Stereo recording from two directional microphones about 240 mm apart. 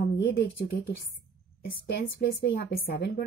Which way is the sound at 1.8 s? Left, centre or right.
Left.